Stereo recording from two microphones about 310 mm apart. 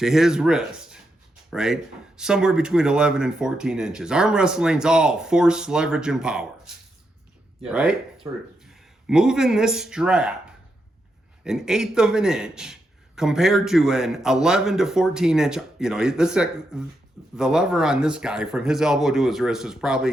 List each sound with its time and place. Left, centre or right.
0.0 s a man's voice: centre
7.6 s speech: centre
11.4 s a man's voice: centre